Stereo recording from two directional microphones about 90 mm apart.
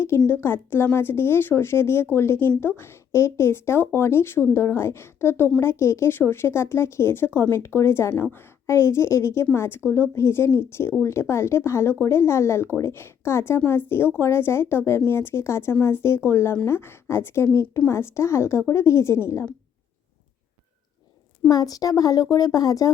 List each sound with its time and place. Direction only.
0.3 s a woman's voice: 25° left (ahead or behind)
21.5 s a woman's voice: 45° left (ahead or behind)